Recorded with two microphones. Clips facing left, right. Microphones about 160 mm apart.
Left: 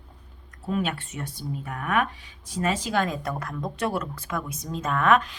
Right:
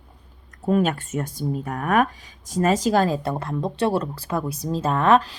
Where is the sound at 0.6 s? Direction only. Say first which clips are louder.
Right 7 dB; 45° right (ahead or behind).